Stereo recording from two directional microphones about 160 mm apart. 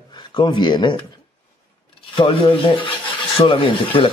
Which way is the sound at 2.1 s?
30° left (ahead or behind).